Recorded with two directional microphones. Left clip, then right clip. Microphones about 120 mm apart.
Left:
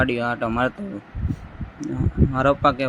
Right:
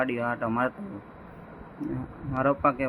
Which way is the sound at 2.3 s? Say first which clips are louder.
Left 5 dB; 60° left (ahead or behind).